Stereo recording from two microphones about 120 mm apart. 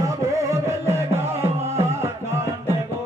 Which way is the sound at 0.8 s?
25° right (ahead or behind).